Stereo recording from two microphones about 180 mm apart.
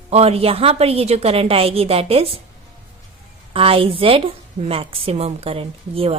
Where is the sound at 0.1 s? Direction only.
35° right (ahead or behind).